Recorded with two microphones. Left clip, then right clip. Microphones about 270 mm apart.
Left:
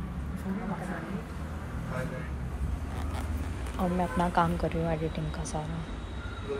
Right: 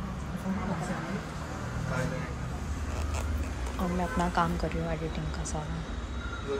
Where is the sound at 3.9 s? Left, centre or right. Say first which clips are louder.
Left 2 dB; centre.